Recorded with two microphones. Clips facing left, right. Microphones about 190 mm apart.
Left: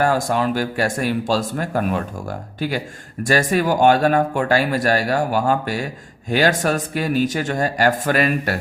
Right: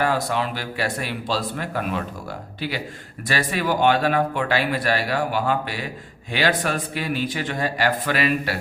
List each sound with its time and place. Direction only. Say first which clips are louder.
0.0 s speech: left 4 dB; 45° left (ahead or behind)